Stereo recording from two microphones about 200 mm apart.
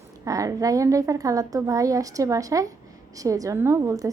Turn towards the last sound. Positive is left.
turn(degrees=-15)  # may be behind; listen again after turning